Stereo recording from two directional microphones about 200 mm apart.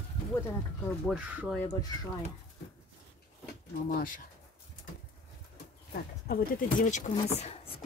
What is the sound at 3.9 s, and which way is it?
Speech, 45° left (ahead or behind).